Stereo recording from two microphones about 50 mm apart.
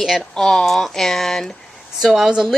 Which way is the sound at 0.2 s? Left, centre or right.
Centre.